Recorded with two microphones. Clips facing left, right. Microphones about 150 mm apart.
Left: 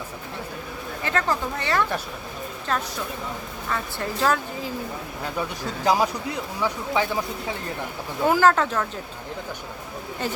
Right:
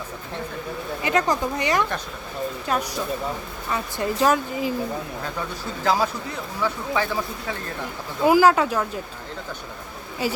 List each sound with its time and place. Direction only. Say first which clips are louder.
1.0 s speech: right 3 dB; 15° right (ahead or behind)
5.4 s a man's voice: left 3 dB; 15° left (ahead or behind)
8.2 s speech: right 2 dB; 10° right (ahead or behind)
10.2 s speech: right 3 dB; 10° right (ahead or behind)